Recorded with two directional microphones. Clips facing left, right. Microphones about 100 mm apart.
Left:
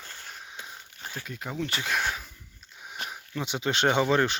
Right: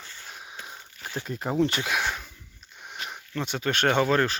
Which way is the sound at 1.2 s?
40° right (ahead or behind).